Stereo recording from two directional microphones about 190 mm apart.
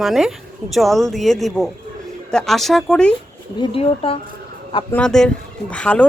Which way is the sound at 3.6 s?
30° left (ahead or behind).